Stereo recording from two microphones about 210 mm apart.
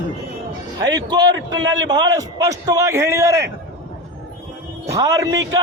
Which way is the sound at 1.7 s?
20° right (ahead or behind).